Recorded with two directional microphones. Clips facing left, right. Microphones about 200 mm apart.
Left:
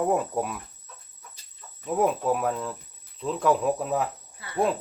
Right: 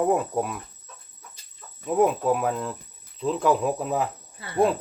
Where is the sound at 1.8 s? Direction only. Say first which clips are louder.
Right 3 dB; centre (ahead or behind).